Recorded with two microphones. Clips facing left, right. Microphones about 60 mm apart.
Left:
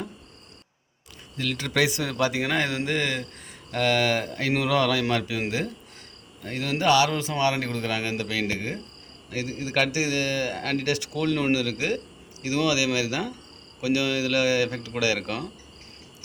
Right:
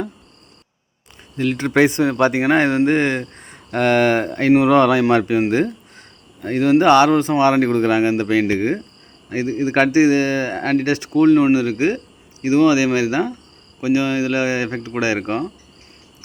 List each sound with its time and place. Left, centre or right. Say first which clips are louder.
1.4 s speech: right 9 dB; right